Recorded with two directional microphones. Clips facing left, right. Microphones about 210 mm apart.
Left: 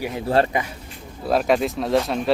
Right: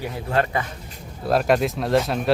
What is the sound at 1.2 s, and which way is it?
Speech, centre (ahead or behind).